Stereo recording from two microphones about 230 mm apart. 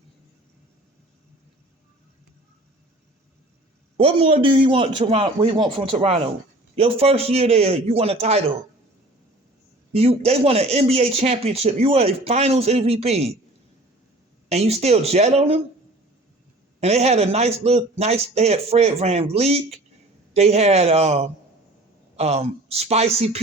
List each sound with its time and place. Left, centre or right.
3.9 s speech: right
9.9 s speech: right
14.5 s speech: right
16.8 s speech: right